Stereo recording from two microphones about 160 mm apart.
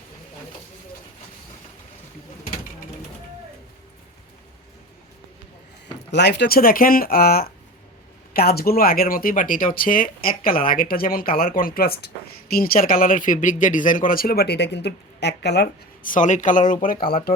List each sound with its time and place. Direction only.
6.1 s speech: 90° left
16.1 s speech: 50° left (ahead or behind); by 17.3 s 65° left (ahead or behind)